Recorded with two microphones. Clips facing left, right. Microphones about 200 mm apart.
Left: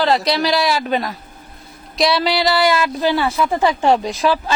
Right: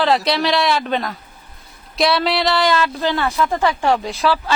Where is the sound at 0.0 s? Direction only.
Centre (ahead or behind).